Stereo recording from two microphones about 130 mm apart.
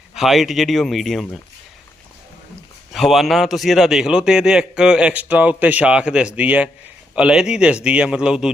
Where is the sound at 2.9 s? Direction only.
Centre (ahead or behind).